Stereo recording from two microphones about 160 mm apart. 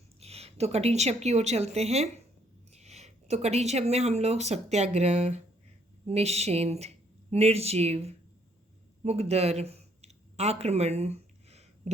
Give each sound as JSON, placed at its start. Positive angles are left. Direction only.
{"t": 0.2, "sound": "a woman's voice", "side_deg": -40}